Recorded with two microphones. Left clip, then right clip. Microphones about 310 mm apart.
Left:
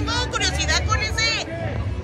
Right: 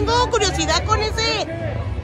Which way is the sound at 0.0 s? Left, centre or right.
Centre.